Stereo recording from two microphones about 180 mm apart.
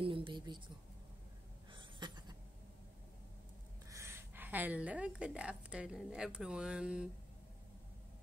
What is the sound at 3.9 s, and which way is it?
A woman's voice, 15° right (ahead or behind).